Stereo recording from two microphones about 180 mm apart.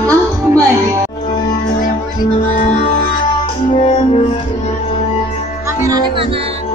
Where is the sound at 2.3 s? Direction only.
40° left (ahead or behind).